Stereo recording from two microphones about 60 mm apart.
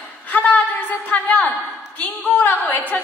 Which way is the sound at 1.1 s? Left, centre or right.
Left.